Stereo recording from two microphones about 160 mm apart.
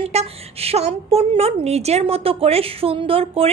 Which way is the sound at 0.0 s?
40° right (ahead or behind).